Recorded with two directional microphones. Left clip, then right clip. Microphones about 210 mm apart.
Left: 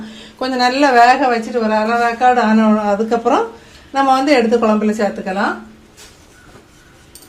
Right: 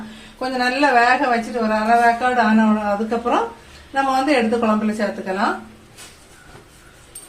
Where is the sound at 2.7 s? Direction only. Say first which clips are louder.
Left 5 dB; 50° left (ahead or behind).